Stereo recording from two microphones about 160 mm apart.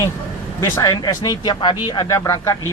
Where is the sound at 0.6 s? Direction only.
20° left (ahead or behind).